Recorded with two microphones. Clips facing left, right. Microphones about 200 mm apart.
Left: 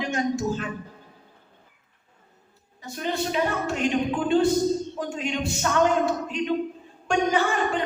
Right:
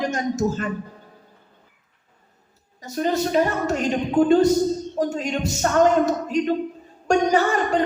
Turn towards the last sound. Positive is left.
turn(degrees=-40)  # may be behind; listen again after turning